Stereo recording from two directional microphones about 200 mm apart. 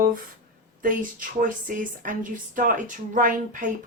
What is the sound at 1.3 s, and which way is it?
Speech, 40° right (ahead or behind).